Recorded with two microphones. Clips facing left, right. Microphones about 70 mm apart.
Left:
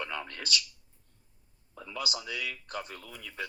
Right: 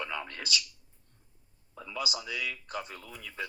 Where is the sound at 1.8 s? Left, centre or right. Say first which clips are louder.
Right 1 dB; centre.